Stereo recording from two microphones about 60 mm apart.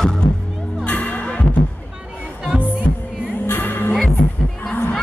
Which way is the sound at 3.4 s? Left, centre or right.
Left.